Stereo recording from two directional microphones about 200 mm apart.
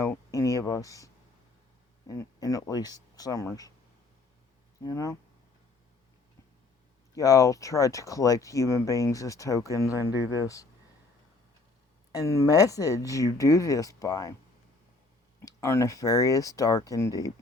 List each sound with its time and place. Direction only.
0.0 s a sound: 15° left (ahead or behind)
2.0 s speech: 15° left (ahead or behind)
4.8 s speech: 15° left (ahead or behind)
7.1 s speech: 15° left (ahead or behind)
12.1 s speech: 15° left (ahead or behind)
15.4 s speech: 15° left (ahead or behind)